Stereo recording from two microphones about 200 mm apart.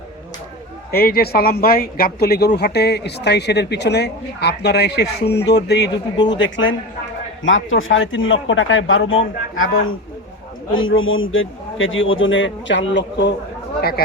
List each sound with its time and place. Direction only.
0.9 s speech: 50° left (ahead or behind)
6.3 s a man's voice: 70° left (ahead or behind)